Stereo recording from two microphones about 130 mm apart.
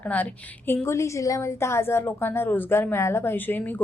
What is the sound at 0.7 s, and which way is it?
A woman's voice, 20° left (ahead or behind).